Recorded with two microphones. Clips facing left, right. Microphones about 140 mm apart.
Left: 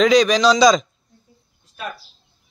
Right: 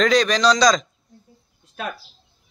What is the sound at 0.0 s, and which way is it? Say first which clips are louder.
Speech: left 3 dB; centre (ahead or behind).